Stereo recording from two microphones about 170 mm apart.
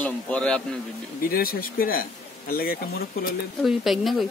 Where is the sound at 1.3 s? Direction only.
60° left (ahead or behind).